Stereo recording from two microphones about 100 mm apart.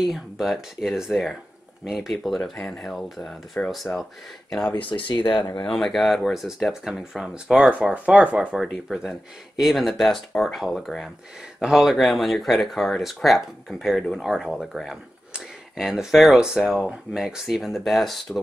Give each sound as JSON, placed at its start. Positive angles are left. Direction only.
{"t": 0.0, "sound": "speech", "side_deg": 0}
{"t": 4.7, "sound": "speech", "side_deg": 60}
{"t": 5.6, "sound": "speech", "side_deg": 5}
{"t": 8.5, "sound": "speech", "side_deg": 0}